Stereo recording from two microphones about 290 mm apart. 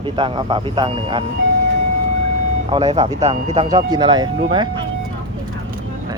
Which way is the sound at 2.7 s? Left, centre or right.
Centre.